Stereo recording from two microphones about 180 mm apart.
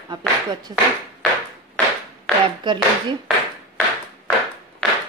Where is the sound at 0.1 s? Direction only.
25° right (ahead or behind).